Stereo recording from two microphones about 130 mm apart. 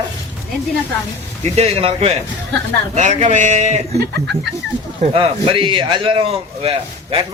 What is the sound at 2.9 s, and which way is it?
Speech, 65° right (ahead or behind).